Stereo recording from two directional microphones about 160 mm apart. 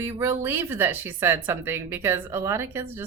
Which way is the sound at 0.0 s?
15° right (ahead or behind).